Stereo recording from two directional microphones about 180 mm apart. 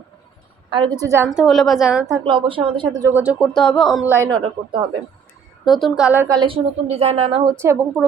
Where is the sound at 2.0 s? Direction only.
25° right (ahead or behind).